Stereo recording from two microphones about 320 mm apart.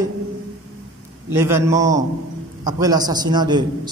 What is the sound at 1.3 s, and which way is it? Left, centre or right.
A man's voice, centre.